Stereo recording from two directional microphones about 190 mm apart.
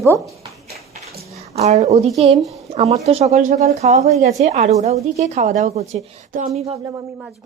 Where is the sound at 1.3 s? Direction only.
35° right (ahead or behind).